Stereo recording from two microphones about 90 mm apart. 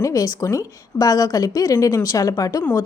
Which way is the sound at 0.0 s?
40° left (ahead or behind).